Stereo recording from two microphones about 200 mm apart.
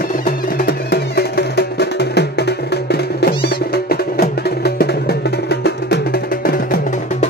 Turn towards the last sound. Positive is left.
turn(degrees=50)  # may be behind; listen again after turning